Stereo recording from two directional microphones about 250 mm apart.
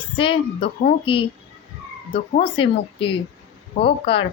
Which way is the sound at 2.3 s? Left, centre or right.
Left.